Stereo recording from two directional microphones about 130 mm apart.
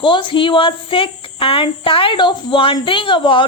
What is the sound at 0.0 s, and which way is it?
Speech, 40° left (ahead or behind).